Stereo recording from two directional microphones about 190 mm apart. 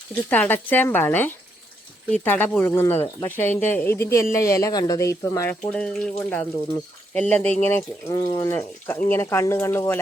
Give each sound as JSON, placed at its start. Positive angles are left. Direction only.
{"t": 0.3, "sound": "speech", "side_deg": 10}